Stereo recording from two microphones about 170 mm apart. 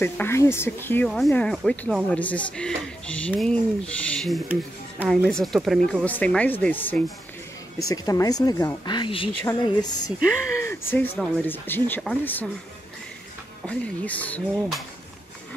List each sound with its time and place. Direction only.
0.0 s speech: 15° left (ahead or behind)
1.0 s speech: centre (ahead or behind)
7.9 s speech: 20° left (ahead or behind)
10.6 s speech: 15° left (ahead or behind)
13.7 s speech: 10° left (ahead or behind)